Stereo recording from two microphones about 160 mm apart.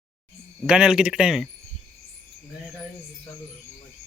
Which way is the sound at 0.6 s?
5° right (ahead or behind).